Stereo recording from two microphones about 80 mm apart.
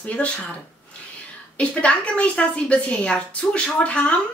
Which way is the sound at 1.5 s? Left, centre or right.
Centre.